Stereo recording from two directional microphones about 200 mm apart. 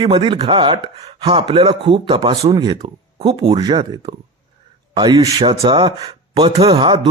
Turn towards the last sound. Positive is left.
turn(degrees=-25)  # may be behind; listen again after turning